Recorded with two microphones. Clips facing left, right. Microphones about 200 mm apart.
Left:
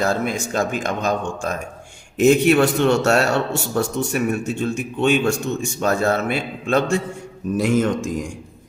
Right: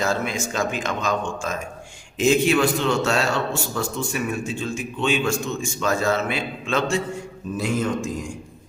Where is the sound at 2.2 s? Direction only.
45° left (ahead or behind).